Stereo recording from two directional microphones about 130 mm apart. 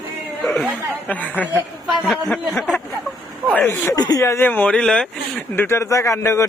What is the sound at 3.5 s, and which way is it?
Speech, 15° left (ahead or behind).